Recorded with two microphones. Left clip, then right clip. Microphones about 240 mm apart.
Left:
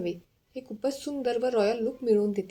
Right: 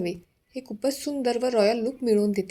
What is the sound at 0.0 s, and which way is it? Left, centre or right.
A woman's voice, right.